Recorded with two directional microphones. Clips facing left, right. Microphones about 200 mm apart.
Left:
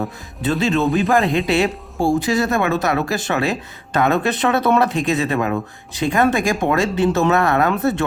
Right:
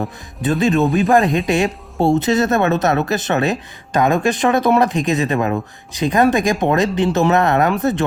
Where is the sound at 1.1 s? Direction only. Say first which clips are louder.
Right 2 dB; 20° right (ahead or behind).